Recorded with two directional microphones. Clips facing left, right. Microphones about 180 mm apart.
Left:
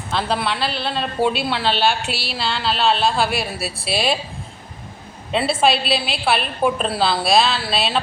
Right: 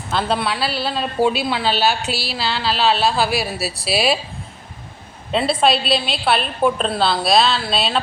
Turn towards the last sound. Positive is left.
turn(degrees=5)  # may be behind; listen again after turning